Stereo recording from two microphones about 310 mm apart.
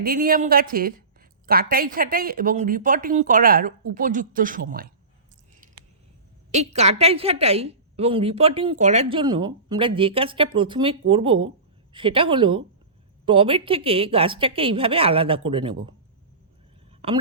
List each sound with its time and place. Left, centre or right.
0.0 s speech: right
6.5 s a woman's voice: right
17.0 s a woman's voice: centre